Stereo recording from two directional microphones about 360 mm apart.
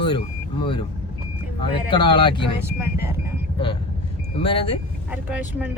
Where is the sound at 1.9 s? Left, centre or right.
Centre.